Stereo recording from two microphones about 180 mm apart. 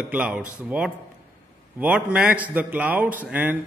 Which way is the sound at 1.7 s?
10° right (ahead or behind).